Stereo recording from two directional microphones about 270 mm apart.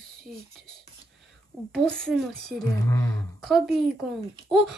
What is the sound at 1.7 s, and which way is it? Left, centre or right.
A woman's voice, centre.